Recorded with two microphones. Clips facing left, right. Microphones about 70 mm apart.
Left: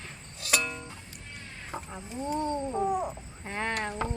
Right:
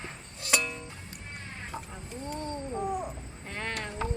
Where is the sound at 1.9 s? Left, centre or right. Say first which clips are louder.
Left 5 dB; centre.